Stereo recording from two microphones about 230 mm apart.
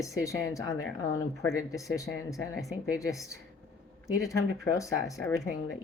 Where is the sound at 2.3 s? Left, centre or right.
Centre.